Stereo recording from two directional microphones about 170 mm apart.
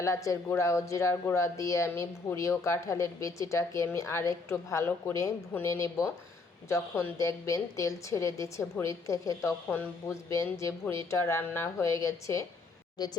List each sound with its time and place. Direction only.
0.0 s speech: 15° left (ahead or behind)